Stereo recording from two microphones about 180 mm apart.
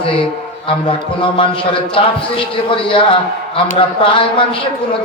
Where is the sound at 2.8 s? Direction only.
30° left (ahead or behind).